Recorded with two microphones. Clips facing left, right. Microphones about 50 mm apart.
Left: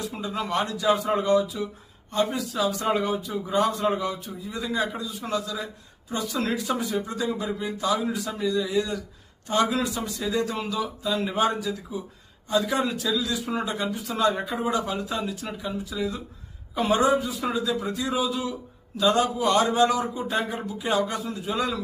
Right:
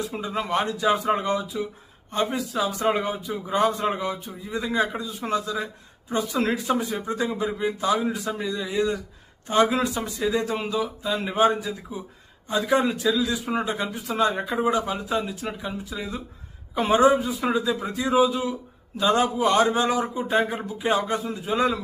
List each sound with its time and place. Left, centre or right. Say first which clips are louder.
0.1 s a man's voice: right 2 dB; right